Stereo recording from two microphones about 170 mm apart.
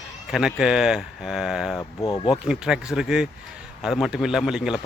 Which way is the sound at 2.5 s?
5° right (ahead or behind).